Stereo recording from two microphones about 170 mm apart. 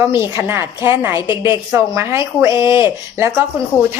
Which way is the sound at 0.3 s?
15° right (ahead or behind).